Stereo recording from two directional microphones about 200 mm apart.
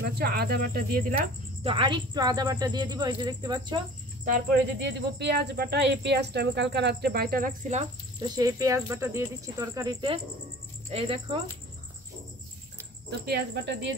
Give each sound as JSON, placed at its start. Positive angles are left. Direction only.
{"t": 0.0, "sound": "speech", "side_deg": -50}
{"t": 1.6, "sound": "speech", "side_deg": -25}
{"t": 4.8, "sound": "speech", "side_deg": -60}
{"t": 8.2, "sound": "speech", "side_deg": -20}
{"t": 10.9, "sound": "speech", "side_deg": -30}
{"t": 13.2, "sound": "speech", "side_deg": -55}